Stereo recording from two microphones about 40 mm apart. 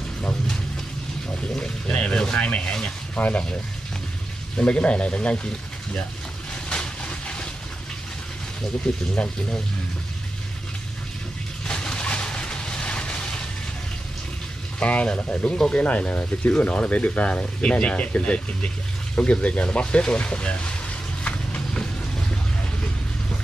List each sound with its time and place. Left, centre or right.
1.6 s speech: left
3.2 s speech: left
4.6 s speech: left
6.7 s vehicle: left
8.8 s speech: left
11.6 s vehicle: left
14.8 s speech: left
15.4 s speech: centre
15.7 s speech: left
21.2 s vehicle: left